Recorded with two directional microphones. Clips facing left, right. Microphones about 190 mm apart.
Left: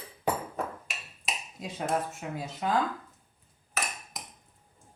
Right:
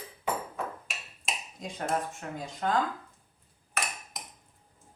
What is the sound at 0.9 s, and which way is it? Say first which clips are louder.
Speech: even; centre (ahead or behind).